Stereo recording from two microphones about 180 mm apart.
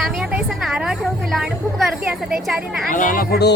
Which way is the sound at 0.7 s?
Centre (ahead or behind).